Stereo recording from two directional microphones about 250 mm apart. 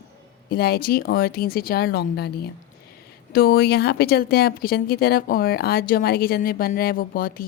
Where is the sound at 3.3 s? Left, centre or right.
Left.